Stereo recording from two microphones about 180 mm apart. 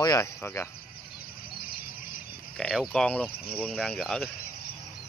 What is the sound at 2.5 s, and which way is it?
Speech, 5° left (ahead or behind).